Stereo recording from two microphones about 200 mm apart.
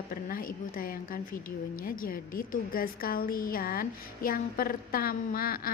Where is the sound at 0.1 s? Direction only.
45° left (ahead or behind).